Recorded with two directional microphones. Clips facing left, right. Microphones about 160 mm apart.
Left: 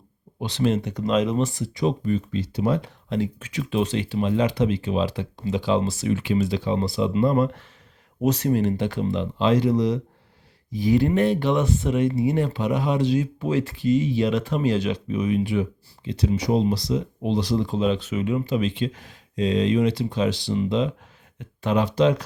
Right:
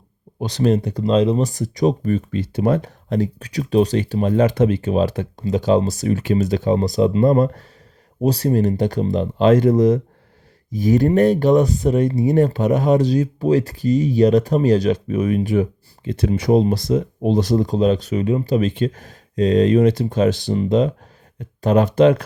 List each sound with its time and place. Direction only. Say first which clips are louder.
0.3 s speech: right 5 dB; 40° right (ahead or behind)